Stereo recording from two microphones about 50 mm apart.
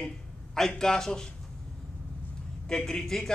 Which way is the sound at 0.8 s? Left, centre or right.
Centre.